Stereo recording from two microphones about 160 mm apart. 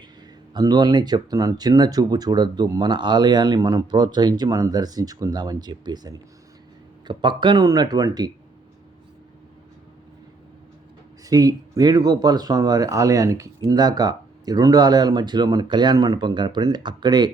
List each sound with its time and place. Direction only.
0.5 s speech: 25° right (ahead or behind)
11.3 s speech: 25° right (ahead or behind)